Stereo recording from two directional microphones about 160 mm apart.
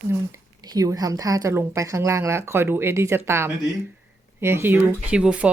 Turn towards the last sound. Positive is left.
turn(degrees=-5)  # may be behind; listen again after turning